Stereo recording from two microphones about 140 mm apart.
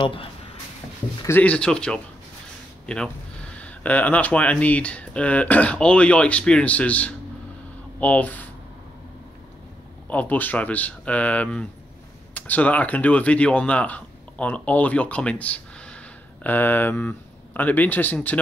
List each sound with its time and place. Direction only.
0.0 s speech: 40° left (ahead or behind)
1.2 s speech: 15° left (ahead or behind)
3.5 s speech: 10° left (ahead or behind)
10.0 s speech: 10° left (ahead or behind)